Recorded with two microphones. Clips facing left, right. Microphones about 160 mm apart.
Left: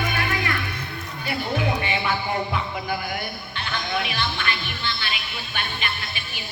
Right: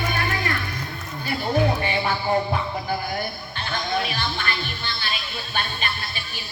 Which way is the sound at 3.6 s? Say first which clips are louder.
Right 2 dB; 40° right (ahead or behind).